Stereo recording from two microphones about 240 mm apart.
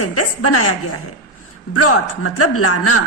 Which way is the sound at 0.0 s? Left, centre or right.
Left.